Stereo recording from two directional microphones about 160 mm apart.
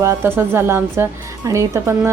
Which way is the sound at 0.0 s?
15° right (ahead or behind).